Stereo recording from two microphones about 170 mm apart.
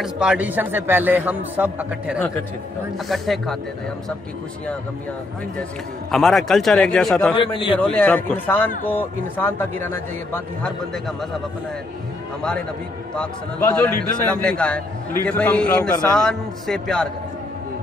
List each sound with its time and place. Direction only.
0.0 s a man's voice: 5° right (ahead or behind)
6.1 s a man's voice: centre (ahead or behind)
7.3 s a man's voice: 30° left (ahead or behind)
7.8 s speech: 10° left (ahead or behind)
13.1 s a man's voice: 10° left (ahead or behind)